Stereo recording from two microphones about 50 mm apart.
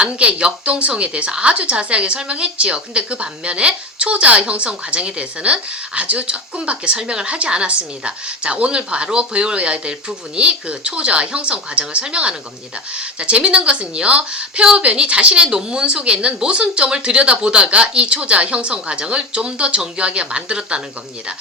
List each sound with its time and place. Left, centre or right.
0.0 s a woman's voice: right